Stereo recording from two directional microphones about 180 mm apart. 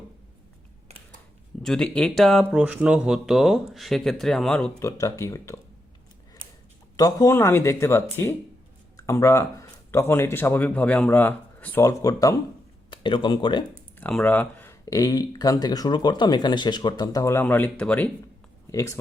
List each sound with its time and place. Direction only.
1.6 s speech: 5° left (ahead or behind)
4.9 s speech: 15° left (ahead or behind)
6.9 s speech: 20° left (ahead or behind)
14.0 s speech: 5° left (ahead or behind)